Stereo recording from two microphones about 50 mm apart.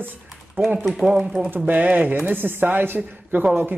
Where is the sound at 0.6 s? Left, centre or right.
Centre.